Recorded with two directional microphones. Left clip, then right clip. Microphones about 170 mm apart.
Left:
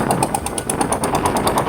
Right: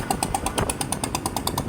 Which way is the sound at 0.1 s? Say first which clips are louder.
Left 6 dB; 20° right (ahead or behind).